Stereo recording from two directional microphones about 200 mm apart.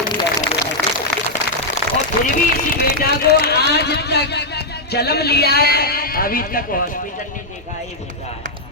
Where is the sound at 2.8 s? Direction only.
50° left (ahead or behind).